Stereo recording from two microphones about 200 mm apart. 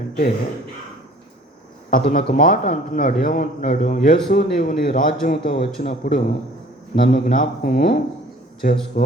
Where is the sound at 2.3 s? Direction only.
40° left (ahead or behind).